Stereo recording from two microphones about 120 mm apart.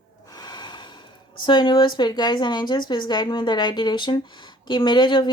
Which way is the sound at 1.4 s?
40° left (ahead or behind).